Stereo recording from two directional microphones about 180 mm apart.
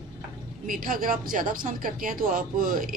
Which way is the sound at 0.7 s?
50° right (ahead or behind).